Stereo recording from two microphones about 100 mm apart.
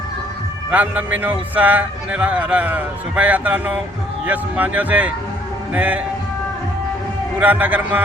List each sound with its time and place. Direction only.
0.7 s speech: 15° right (ahead or behind)
7.3 s speech: 15° right (ahead or behind)